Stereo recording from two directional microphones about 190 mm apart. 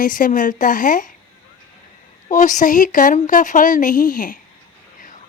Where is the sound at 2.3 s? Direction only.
40° left (ahead or behind).